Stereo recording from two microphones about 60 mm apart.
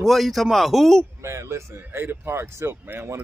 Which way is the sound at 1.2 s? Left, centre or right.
Right.